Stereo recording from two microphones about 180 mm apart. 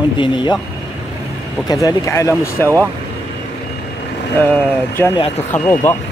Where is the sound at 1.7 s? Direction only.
20° left (ahead or behind).